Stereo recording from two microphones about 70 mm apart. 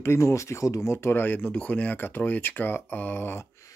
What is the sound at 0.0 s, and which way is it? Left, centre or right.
Speech, left.